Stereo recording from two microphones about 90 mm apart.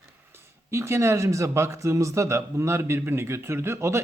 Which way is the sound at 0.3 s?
25° right (ahead or behind).